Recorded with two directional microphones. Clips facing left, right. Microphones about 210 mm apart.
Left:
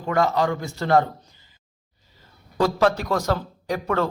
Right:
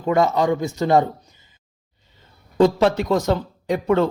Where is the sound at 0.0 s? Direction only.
20° right (ahead or behind).